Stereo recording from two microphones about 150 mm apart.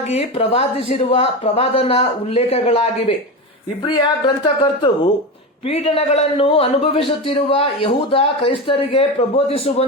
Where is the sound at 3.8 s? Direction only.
30° left (ahead or behind).